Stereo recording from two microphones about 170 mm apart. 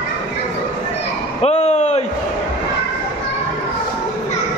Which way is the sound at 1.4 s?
40° left (ahead or behind).